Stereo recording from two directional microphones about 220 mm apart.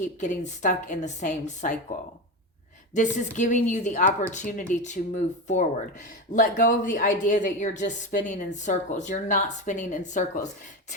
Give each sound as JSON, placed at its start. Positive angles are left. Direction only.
{"t": 0.2, "sound": "speech", "side_deg": 35}
{"t": 2.9, "sound": "speech", "side_deg": 35}